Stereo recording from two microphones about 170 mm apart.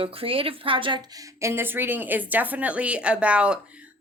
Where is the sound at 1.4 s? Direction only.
15° right (ahead or behind).